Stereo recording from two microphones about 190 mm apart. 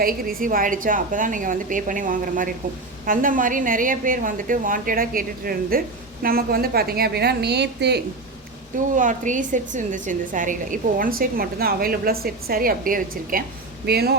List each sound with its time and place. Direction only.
0.0 s a woman's voice: 50° right (ahead or behind)
9.0 s a woman's voice: 40° right (ahead or behind)